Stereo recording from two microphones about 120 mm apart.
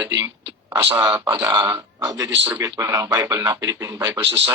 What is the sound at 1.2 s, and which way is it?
Speech, 25° right (ahead or behind).